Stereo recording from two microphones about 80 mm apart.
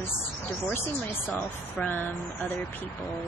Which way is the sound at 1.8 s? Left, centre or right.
Left.